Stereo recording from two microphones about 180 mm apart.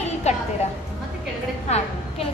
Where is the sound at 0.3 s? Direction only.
40° left (ahead or behind).